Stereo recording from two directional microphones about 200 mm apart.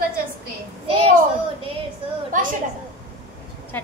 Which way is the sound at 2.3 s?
40° right (ahead or behind).